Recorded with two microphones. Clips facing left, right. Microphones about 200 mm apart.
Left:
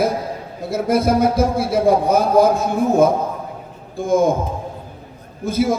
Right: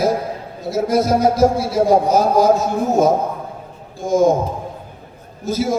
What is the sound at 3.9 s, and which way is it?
Speech, 55° left (ahead or behind).